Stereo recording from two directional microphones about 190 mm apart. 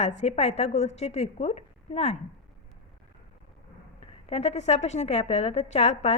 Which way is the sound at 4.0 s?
30° left (ahead or behind).